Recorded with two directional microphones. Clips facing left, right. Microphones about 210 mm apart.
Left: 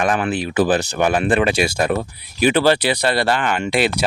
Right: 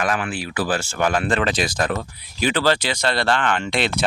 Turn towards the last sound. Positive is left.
turn(degrees=5)  # may be behind; listen again after turning